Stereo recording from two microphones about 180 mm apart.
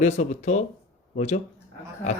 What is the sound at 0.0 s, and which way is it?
Speech, 40° left (ahead or behind).